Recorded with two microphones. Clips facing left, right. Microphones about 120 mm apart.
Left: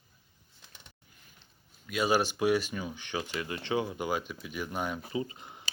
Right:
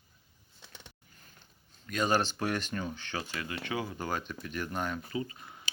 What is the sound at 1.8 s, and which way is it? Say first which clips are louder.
Speech: left 1 dB; 10° left (ahead or behind).